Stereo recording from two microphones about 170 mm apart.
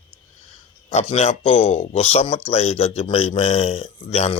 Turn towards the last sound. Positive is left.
turn(degrees=35)  # may be behind; listen again after turning